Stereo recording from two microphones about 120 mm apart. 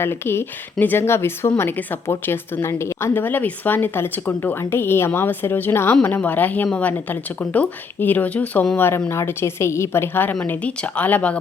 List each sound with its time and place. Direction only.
0.0 s speech: 20° left (ahead or behind)